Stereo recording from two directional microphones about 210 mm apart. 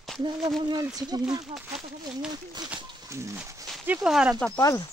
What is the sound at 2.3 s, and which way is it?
Speech, 20° right (ahead or behind).